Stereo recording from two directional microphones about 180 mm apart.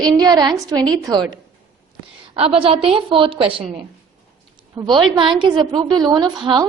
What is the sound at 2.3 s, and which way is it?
A woman's voice, 30° right (ahead or behind).